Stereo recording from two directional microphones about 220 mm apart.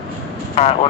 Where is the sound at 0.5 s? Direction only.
25° left (ahead or behind).